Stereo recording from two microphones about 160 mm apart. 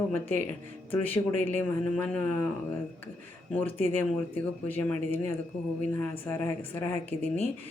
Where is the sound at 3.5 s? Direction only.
10° left (ahead or behind).